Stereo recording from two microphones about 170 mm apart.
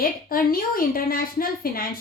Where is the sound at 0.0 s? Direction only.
60° left (ahead or behind).